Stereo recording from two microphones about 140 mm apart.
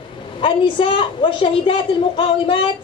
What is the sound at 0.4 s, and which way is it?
A woman's voice, 40° left (ahead or behind).